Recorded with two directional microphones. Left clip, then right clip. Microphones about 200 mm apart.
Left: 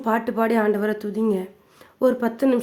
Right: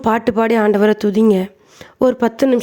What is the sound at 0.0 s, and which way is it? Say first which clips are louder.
Speech: right 7 dB; 40° right (ahead or behind).